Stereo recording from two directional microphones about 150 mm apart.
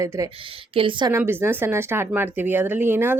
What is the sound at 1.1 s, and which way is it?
Speech, 15° right (ahead or behind).